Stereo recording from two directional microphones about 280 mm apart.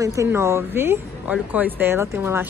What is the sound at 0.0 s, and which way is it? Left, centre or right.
A woman's voice, centre.